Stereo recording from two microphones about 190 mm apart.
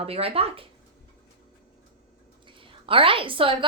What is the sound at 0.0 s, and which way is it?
Speech, 30° right (ahead or behind).